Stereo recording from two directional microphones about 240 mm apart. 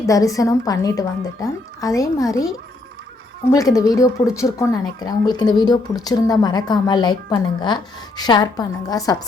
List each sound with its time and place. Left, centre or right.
0.0 s speech: centre
3.5 s speech: centre